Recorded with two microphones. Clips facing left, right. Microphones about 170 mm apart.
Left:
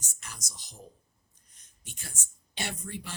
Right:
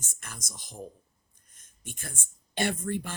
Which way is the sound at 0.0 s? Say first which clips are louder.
Right 2 dB; 50° right (ahead or behind).